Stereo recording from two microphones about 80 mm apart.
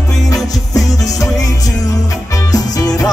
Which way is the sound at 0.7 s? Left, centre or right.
Left.